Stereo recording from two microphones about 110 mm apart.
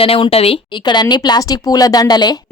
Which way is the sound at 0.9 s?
40° left (ahead or behind).